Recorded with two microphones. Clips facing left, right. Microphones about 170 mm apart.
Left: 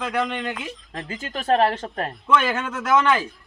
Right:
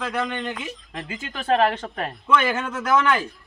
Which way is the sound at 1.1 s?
40° left (ahead or behind).